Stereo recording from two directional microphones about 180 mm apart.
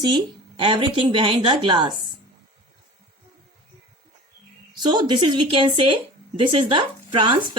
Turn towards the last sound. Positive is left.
turn(degrees=-30)  # may be behind; listen again after turning